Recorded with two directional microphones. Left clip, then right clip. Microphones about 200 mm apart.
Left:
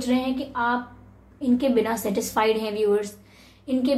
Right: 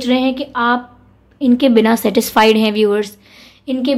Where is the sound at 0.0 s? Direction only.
50° right (ahead or behind).